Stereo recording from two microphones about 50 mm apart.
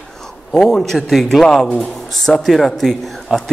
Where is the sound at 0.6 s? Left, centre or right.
Centre.